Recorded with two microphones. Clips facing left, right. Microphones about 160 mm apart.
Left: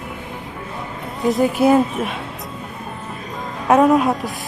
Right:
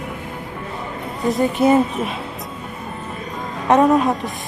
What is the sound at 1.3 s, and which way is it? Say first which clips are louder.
Speech: left 1 dB; centre (ahead or behind).